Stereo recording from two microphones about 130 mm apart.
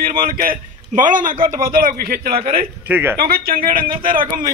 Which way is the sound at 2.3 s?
50° right (ahead or behind).